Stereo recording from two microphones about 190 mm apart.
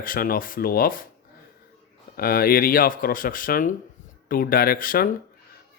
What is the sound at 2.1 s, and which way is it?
Speech, 50° left (ahead or behind).